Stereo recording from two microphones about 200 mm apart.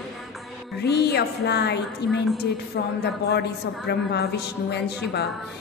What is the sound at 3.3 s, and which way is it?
A woman's voice, 55° left (ahead or behind).